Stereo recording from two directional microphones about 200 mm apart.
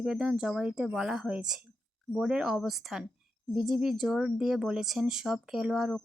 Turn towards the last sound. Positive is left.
turn(degrees=0)  # may be behind; listen again after turning